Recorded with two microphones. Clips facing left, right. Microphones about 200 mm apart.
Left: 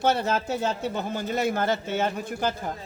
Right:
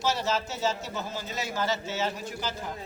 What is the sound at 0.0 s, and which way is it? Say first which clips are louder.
A man's voice: left 4 dB; 55° left (ahead or behind).